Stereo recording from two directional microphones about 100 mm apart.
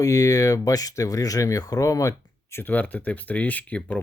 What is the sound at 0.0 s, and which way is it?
Speech, 35° left (ahead or behind).